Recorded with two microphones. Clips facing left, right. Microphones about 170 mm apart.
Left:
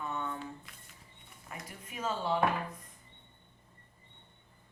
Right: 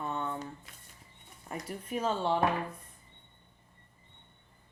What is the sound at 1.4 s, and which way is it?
Speech, 35° right (ahead or behind).